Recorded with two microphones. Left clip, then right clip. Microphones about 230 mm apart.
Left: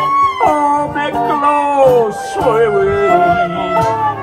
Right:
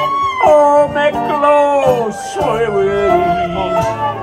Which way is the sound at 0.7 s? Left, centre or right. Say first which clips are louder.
Right 4 dB; centre.